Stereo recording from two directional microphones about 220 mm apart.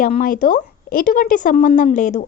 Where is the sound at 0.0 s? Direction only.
40° left (ahead or behind).